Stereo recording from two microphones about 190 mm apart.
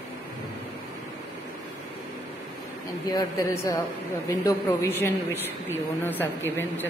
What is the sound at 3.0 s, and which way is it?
A woman's voice, 15° left (ahead or behind).